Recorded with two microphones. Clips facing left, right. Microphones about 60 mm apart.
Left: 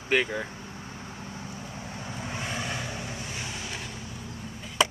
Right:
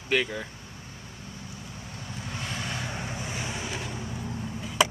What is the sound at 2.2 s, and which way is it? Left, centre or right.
Vehicle, centre.